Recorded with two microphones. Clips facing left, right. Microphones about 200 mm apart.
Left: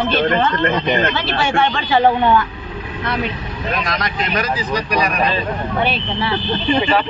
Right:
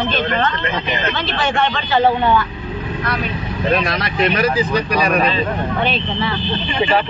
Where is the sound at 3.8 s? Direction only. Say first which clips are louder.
Right 4 dB; 30° right (ahead or behind).